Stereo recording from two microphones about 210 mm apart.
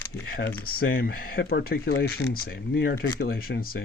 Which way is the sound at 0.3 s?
45° left (ahead or behind).